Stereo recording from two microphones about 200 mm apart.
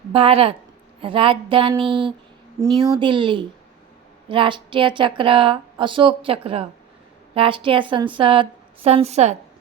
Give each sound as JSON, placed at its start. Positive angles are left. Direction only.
{"t": 0.1, "sound": "speech", "side_deg": -30}